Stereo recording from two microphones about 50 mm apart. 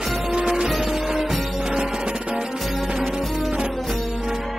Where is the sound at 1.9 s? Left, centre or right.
Centre.